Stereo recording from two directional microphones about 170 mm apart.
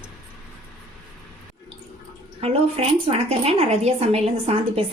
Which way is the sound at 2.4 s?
35° right (ahead or behind).